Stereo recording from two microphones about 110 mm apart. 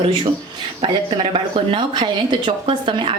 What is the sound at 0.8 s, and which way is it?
A woman's voice, 55° right (ahead or behind).